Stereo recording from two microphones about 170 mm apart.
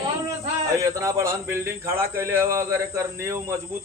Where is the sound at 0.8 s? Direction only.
20° right (ahead or behind).